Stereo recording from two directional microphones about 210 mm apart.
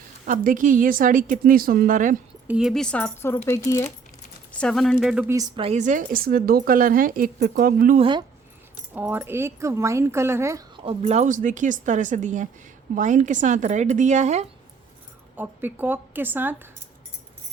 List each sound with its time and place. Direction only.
0.3 s speech: 40° right (ahead or behind)
2.5 s speech: centre (ahead or behind)
5.3 s speech: 20° right (ahead or behind); by 7.9 s 45° right (ahead or behind)
7.9 s speech: 25° right (ahead or behind)
9.0 s speech: 10° right (ahead or behind)
10.8 s speech: 30° right (ahead or behind)
15.4 s speech: 10° right (ahead or behind)